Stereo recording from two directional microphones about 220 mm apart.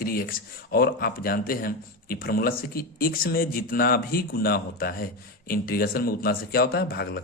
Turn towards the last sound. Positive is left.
turn(degrees=45)  # may be behind; listen again after turning